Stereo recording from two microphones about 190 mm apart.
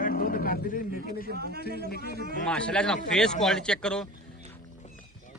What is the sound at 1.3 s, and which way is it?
Speech, 55° right (ahead or behind).